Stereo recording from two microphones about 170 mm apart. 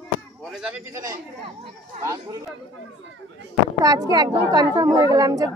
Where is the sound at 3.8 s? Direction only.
20° right (ahead or behind).